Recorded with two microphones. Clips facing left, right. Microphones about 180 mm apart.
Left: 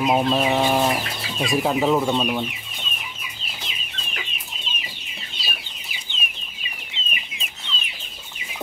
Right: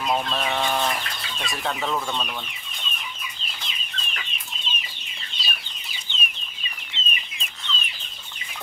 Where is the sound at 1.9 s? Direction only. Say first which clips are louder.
Left 8 dB; 20° left (ahead or behind).